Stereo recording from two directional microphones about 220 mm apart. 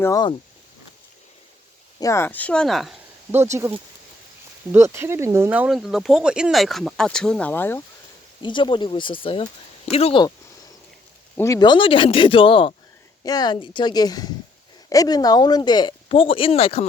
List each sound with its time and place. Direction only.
0.0 s speech: 15° left (ahead or behind)
2.0 s speech: 15° left (ahead or behind)
3.4 s speech: 10° right (ahead or behind); by 7.8 s 10° left (ahead or behind)
8.4 s speech: 20° left (ahead or behind)
11.3 s speech: 15° left (ahead or behind)